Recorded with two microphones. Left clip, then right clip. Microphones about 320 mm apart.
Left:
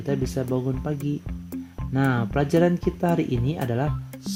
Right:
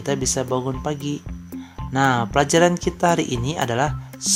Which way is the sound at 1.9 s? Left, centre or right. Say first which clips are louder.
Right 6 dB; right.